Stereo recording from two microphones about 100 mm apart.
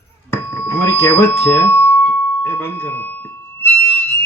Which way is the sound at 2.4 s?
25° left (ahead or behind).